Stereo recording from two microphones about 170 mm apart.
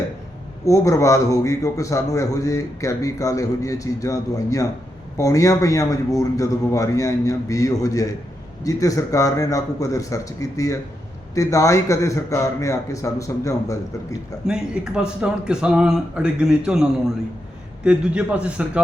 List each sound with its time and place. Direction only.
0.6 s a man's voice: 20° left (ahead or behind)
14.4 s speech: 5° right (ahead or behind)
17.8 s a man's voice: 5° right (ahead or behind)